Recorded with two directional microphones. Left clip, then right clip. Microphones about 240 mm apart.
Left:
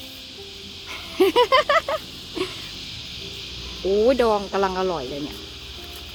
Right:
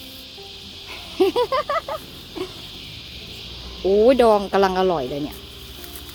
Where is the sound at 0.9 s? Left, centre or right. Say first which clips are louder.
Even; centre.